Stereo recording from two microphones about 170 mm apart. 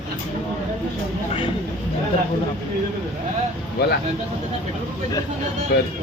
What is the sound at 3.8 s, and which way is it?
Speech, 70° left (ahead or behind).